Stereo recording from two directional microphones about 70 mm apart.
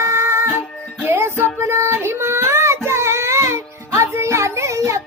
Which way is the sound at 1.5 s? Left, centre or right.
Right.